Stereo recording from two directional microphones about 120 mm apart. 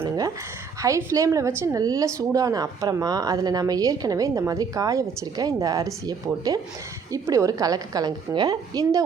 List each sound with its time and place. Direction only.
0.8 s a woman's voice: 25° right (ahead or behind)